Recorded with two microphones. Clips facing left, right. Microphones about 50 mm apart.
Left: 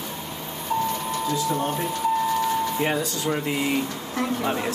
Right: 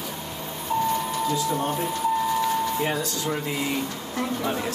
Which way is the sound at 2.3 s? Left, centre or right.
Centre.